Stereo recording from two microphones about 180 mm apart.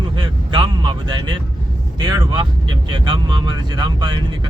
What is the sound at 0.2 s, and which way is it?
Vehicle, 25° right (ahead or behind).